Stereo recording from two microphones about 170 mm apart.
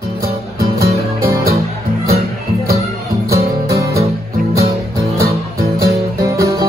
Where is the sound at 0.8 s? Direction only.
65° right (ahead or behind).